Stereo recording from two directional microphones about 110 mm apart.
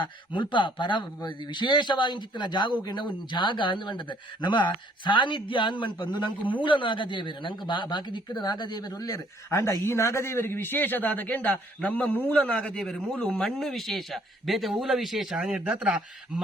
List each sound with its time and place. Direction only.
0.0 s speech: 45° left (ahead or behind); by 16.4 s 5° right (ahead or behind)